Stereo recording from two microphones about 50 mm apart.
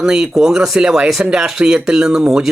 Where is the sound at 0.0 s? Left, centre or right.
Centre.